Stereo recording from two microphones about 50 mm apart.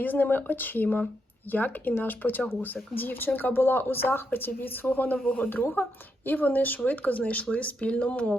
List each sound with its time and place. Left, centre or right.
0.0 s speech: left